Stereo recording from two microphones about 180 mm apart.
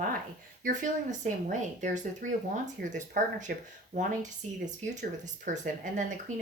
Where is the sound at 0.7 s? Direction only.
45° right (ahead or behind).